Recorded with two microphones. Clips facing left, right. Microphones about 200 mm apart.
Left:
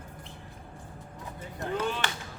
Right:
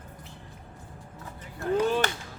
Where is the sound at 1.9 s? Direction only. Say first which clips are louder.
Right 6 dB; 40° right (ahead or behind).